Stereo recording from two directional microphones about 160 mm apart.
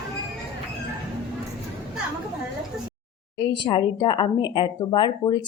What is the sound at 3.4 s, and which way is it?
Speech, 30° left (ahead or behind).